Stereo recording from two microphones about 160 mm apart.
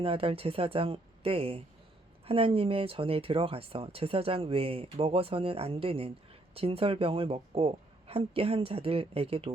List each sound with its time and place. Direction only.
0.0 s speech: 35° right (ahead or behind)